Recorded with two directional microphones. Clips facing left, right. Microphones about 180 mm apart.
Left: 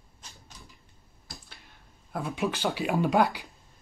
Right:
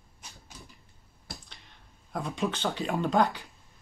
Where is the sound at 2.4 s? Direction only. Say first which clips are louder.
Left 2 dB; 10° left (ahead or behind).